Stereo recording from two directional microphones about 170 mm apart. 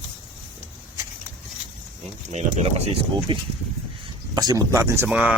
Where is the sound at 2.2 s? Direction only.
40° right (ahead or behind).